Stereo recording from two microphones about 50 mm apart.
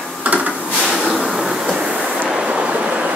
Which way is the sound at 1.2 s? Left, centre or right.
Centre.